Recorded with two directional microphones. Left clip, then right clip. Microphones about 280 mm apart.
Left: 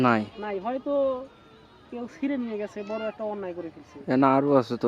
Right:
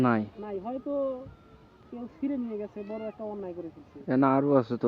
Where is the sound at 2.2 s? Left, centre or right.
Centre.